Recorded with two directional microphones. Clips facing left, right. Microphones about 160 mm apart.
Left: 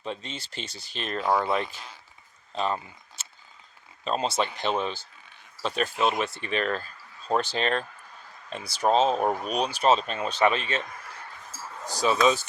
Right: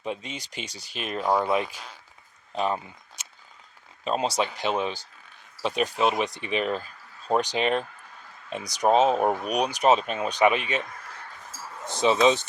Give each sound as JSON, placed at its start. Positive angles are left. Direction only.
{"t": 0.0, "sound": "speech", "side_deg": -10}
{"t": 11.9, "sound": "speech", "side_deg": -25}